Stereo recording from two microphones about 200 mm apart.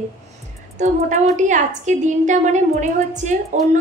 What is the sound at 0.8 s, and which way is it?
A woman's voice, 35° right (ahead or behind).